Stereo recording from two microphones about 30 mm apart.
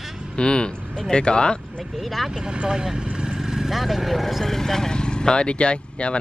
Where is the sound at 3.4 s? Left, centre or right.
Centre.